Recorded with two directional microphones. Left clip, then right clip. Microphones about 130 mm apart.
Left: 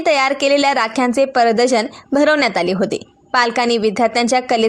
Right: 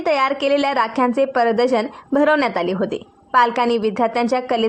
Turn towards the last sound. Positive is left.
turn(degrees=30)  # may be behind; listen again after turning